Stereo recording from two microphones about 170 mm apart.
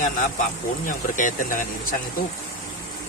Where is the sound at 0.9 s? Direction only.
50° left (ahead or behind).